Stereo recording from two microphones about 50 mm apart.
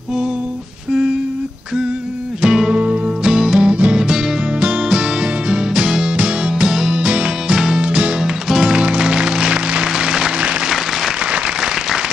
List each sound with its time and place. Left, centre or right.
2.4 s music: centre
2.7 s music: right
3.3 s music: centre
3.6 s music: right
11.3 s applause: centre